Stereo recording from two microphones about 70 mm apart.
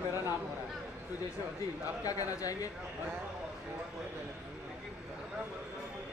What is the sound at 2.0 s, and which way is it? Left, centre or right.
Speech, left.